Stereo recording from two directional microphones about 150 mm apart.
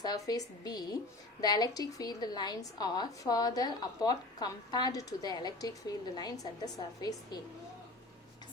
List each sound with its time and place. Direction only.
0.0 s a woman's voice: 25° left (ahead or behind)